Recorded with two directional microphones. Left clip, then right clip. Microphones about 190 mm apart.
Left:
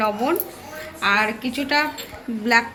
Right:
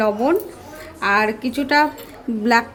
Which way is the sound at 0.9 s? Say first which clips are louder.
Right 2 dB; 55° right (ahead or behind).